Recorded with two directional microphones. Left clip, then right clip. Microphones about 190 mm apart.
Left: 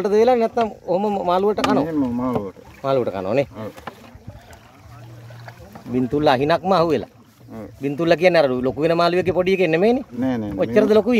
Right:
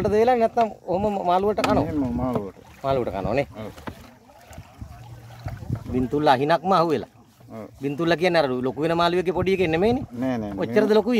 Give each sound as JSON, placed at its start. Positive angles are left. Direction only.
{"t": 0.0, "sound": "speech", "side_deg": 0}
{"t": 5.9, "sound": "speech", "side_deg": 0}
{"t": 10.2, "sound": "speech", "side_deg": -25}
{"t": 10.6, "sound": "speech", "side_deg": 0}